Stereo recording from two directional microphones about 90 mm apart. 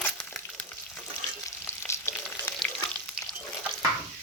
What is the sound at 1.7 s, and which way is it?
Frying, 30° left (ahead or behind).